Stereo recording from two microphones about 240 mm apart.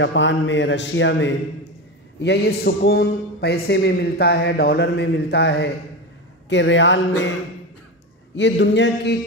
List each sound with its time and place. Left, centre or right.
0.0 s a man's voice: left
8.4 s a man's voice: left